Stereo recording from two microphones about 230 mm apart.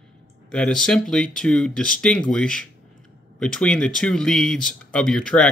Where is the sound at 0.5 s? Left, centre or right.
Centre.